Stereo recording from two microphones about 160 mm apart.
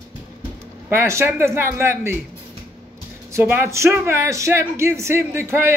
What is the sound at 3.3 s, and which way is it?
Speech, 15° right (ahead or behind).